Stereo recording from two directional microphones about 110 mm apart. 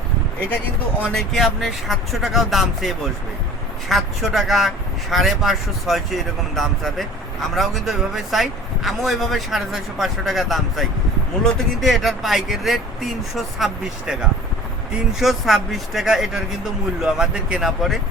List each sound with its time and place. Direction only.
1.1 s speech: centre (ahead or behind)